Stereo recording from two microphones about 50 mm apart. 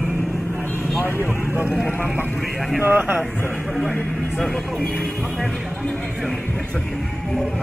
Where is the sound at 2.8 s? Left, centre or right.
Right.